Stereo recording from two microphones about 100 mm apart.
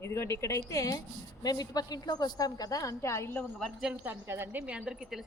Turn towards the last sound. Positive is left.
turn(degrees=-5)  # may be behind; listen again after turning